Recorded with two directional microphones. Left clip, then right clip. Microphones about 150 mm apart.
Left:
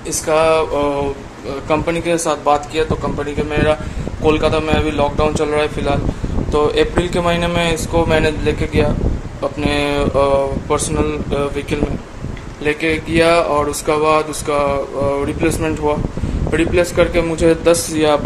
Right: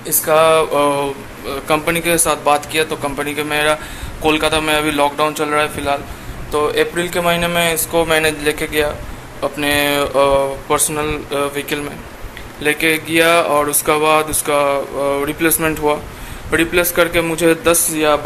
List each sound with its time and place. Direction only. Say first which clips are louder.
0.3 s a man's voice: right 2 dB; centre (ahead or behind)
1.5 s a man's voice: right 1 dB; 10° left (ahead or behind)